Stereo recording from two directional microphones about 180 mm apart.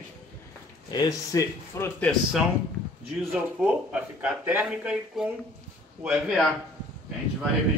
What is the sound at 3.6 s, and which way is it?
A man's voice, 10° right (ahead or behind).